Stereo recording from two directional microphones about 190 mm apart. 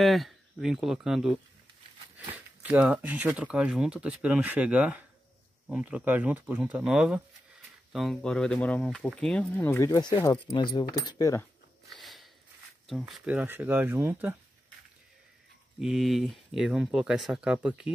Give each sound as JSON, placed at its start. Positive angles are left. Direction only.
{"t": 0.0, "sound": "speech", "side_deg": 0}
{"t": 11.9, "sound": "a sound", "side_deg": 0}
{"t": 12.8, "sound": "speech", "side_deg": 0}
{"t": 15.8, "sound": "speech", "side_deg": 0}